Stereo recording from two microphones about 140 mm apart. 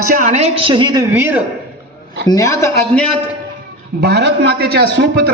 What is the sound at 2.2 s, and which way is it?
Speech, 25° left (ahead or behind).